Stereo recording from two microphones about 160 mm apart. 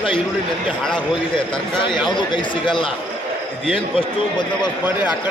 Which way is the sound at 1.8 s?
30° left (ahead or behind).